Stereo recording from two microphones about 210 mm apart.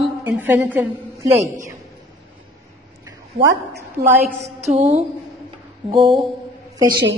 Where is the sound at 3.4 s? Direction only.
55° right (ahead or behind).